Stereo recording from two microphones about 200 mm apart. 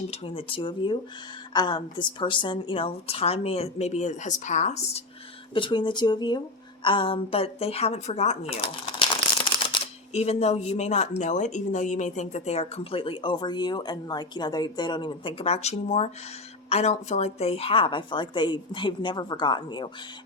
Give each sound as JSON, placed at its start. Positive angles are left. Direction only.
{"t": 0.1, "sound": "speech", "side_deg": 25}